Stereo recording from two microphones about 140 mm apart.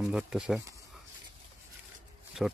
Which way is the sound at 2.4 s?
Centre (ahead or behind).